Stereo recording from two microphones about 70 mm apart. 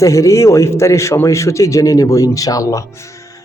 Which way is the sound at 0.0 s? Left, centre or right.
Left.